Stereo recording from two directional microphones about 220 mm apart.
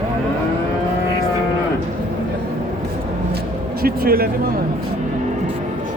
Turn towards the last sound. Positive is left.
turn(degrees=-45)  # may be behind; listen again after turning